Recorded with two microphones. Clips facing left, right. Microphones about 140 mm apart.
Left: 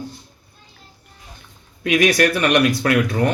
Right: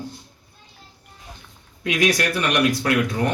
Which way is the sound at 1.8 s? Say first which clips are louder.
Left 5 dB; 65° left (ahead or behind).